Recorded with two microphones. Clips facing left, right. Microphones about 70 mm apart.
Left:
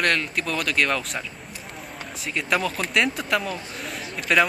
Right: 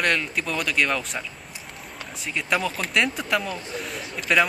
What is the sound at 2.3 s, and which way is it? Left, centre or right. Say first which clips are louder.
Speech: left 1 dB; centre.